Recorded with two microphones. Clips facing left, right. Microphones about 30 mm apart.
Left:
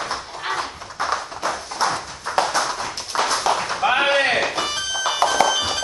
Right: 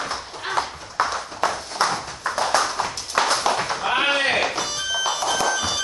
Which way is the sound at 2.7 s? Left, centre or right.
Right.